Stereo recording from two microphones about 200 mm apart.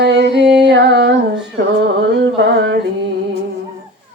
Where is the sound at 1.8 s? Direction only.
55° right (ahead or behind).